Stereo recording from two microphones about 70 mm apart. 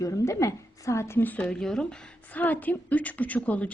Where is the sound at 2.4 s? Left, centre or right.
Left.